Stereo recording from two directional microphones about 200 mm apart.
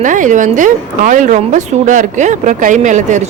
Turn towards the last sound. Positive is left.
turn(degrees=-35)  # may be behind; listen again after turning